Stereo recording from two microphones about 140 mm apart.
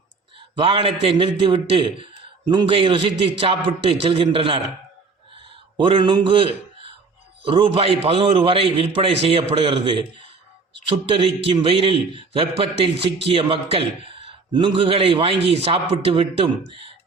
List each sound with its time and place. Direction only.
0.3 s a man's voice: 40° right (ahead or behind)
5.7 s a man's voice: 35° right (ahead or behind)